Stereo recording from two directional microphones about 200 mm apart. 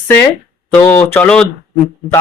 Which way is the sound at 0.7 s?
10° left (ahead or behind).